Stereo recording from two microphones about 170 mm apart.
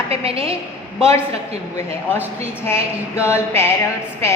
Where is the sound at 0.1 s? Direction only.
35° right (ahead or behind).